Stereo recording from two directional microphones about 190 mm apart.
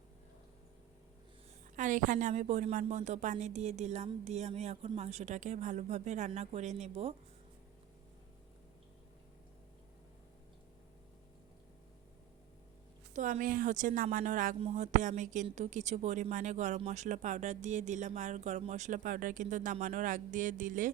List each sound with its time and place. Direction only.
1.7 s speech: 40° right (ahead or behind)
13.1 s a woman's voice: 40° right (ahead or behind)